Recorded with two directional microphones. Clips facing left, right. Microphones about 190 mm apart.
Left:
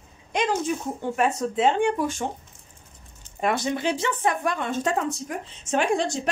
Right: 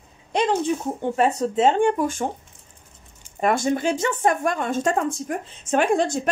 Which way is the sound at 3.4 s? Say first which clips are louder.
Right 4 dB; 45° right (ahead or behind).